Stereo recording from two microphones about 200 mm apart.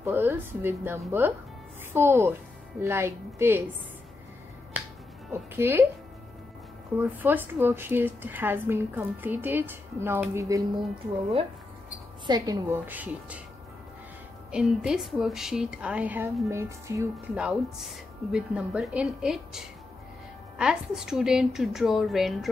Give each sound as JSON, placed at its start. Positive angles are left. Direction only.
{"t": 0.0, "sound": "a woman's voice", "side_deg": -10}
{"t": 4.7, "sound": "finger snapping", "side_deg": -10}
{"t": 5.3, "sound": "a woman's voice", "side_deg": -10}
{"t": 7.0, "sound": "a woman's voice", "side_deg": -10}
{"t": 12.3, "sound": "a woman's voice", "side_deg": -20}
{"t": 14.5, "sound": "a woman's voice", "side_deg": -5}
{"t": 17.4, "sound": "a woman's voice", "side_deg": -5}